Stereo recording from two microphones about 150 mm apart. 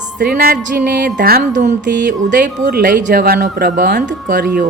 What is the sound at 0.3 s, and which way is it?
Speech, 90° right.